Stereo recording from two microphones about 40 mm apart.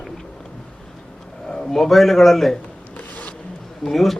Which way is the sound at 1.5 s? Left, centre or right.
Centre.